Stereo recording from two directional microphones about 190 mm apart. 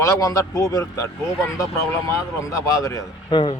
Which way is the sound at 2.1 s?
15° left (ahead or behind).